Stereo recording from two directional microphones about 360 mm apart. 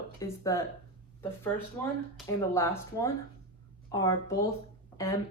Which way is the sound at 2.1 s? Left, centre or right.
Centre.